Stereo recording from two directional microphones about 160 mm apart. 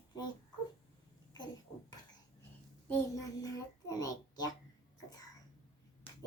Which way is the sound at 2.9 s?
20° left (ahead or behind).